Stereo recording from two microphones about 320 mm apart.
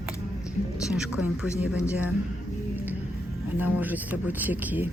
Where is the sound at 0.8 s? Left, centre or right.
Centre.